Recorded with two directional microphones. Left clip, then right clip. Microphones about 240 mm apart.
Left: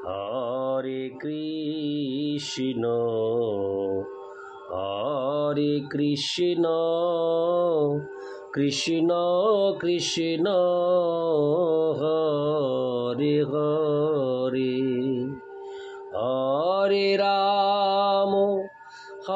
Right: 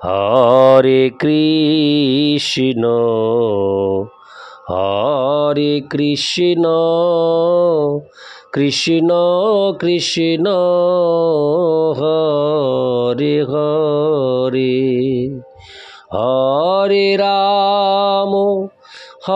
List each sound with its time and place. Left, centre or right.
0.0 s mantra: right
19.3 s music: right